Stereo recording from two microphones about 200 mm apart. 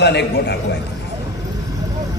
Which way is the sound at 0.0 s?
60° left (ahead or behind).